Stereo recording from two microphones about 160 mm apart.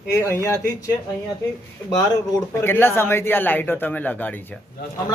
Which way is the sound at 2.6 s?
15° left (ahead or behind).